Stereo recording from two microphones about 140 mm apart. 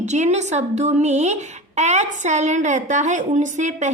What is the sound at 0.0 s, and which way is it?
A woman's voice, 55° right (ahead or behind).